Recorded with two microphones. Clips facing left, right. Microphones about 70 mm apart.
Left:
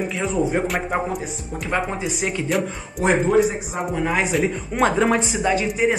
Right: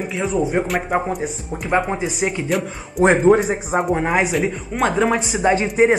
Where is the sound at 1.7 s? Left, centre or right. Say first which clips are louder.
Right 5 dB; centre.